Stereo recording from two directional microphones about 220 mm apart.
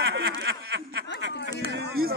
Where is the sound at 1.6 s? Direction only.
45° right (ahead or behind).